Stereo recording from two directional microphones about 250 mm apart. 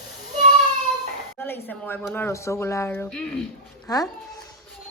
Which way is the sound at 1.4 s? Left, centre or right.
Centre.